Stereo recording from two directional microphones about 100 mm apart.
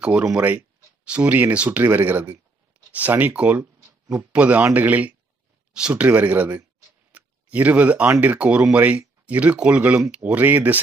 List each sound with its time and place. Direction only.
0.0 s speech: 5° right (ahead or behind)
3.8 s a sound: 30° right (ahead or behind)
4.3 s speech: 15° right (ahead or behind)